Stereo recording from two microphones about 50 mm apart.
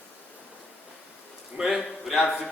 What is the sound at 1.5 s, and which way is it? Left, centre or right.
Speech, centre.